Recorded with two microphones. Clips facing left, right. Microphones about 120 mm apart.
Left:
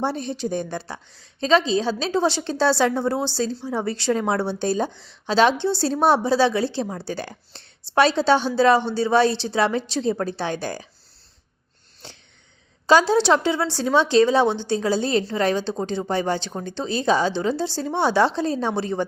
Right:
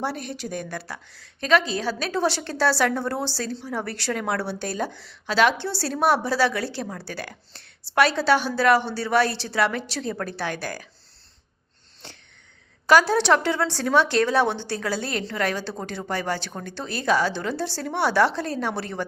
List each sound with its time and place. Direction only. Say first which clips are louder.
0.0 s a woman's voice: left 4 dB; 25° left (ahead or behind)
12.9 s a woman's voice: left 1 dB; 20° left (ahead or behind)